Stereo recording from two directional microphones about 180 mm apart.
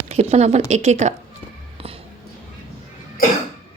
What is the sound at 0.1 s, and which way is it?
Speech, 35° right (ahead or behind).